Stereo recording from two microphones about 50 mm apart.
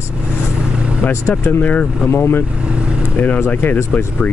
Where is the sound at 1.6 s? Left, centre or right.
Left.